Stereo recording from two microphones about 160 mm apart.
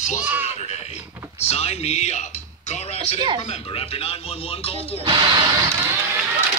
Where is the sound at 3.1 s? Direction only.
30° right (ahead or behind).